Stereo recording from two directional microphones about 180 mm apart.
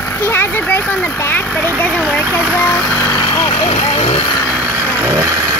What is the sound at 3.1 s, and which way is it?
Vehicle, 25° left (ahead or behind).